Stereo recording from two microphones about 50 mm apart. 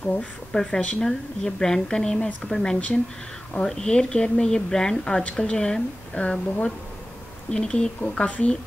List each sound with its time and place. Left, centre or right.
0.0 s speech: left
0.5 s speech: centre
0.7 s a woman's voice: left
1.0 s speech: centre
2.5 s speech: centre
7.5 s a woman's voice: centre